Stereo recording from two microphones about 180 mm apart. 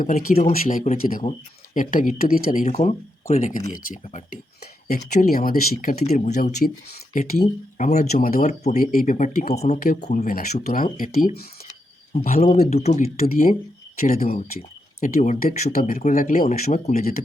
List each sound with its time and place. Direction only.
0.0 s speech: 50° left (ahead or behind)
8.8 s speech: 50° left (ahead or behind)
9.8 s speech: 55° left (ahead or behind); by 13.1 s 35° left (ahead or behind)
13.2 s speech: 50° left (ahead or behind)
14.1 s speech: 40° left (ahead or behind)